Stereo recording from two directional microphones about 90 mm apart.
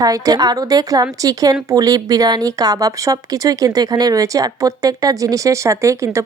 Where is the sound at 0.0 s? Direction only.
45° right (ahead or behind).